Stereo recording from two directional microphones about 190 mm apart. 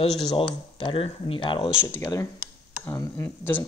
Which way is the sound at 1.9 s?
15° left (ahead or behind).